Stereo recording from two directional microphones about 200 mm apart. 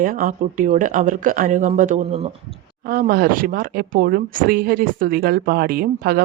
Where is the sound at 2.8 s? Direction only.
45° right (ahead or behind).